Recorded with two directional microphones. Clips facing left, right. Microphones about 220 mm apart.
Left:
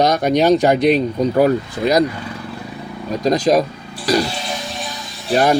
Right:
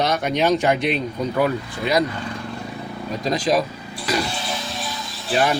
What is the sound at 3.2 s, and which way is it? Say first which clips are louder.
Speech: left 6 dB; 40° left (ahead or behind).